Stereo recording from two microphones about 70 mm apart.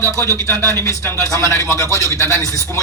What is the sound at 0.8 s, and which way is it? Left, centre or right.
A man's voice, left.